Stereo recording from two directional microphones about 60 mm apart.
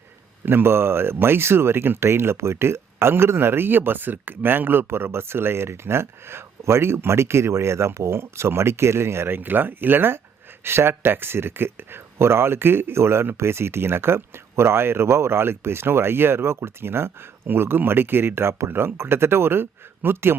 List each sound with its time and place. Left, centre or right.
0.4 s speech: right